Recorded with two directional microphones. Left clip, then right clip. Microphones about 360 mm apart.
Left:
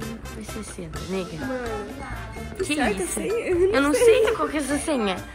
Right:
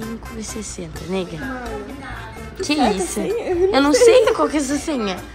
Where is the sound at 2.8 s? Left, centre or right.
Right.